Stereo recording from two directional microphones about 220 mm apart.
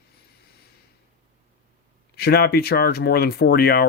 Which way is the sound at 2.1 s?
45° left (ahead or behind).